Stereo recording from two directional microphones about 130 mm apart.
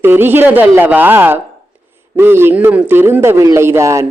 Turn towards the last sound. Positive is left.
turn(degrees=-20)  # may be behind; listen again after turning